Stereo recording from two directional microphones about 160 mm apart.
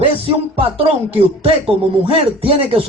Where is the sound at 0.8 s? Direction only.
40° right (ahead or behind).